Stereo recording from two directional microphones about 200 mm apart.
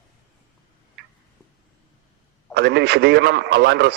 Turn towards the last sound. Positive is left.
turn(degrees=-55)  # may be behind; listen again after turning